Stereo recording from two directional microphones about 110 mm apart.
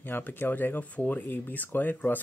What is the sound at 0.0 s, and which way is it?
Speech, 20° left (ahead or behind).